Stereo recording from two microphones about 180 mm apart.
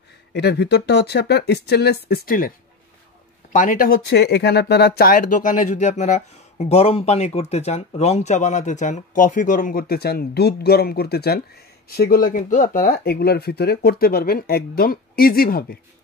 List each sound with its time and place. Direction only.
0.3 s speech: 70° left (ahead or behind); by 2.5 s 50° left (ahead or behind)
3.5 s speech: 50° left (ahead or behind)